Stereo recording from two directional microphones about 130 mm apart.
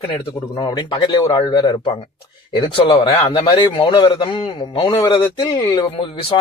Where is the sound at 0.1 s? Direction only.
40° left (ahead or behind).